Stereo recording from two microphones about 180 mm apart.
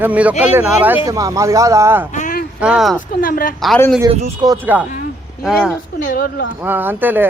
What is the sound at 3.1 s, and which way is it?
Speech, 50° left (ahead or behind).